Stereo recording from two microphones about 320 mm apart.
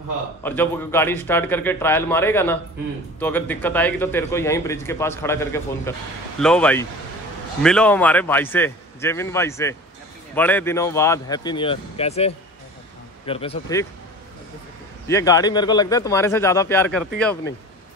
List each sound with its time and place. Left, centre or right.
0.4 s a man's voice: centre
15.0 s a man's voice: centre